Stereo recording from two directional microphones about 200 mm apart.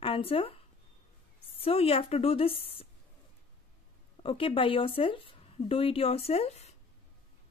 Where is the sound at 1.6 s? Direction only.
30° left (ahead or behind).